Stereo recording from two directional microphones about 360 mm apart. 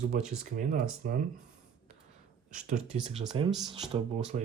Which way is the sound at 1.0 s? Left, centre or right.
Right.